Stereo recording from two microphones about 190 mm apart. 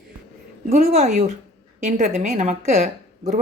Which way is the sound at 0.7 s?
35° right (ahead or behind).